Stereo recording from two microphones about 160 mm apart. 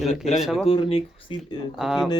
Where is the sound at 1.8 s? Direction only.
Centre (ahead or behind).